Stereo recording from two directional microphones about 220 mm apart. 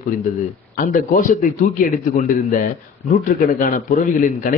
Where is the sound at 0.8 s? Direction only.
35° left (ahead or behind).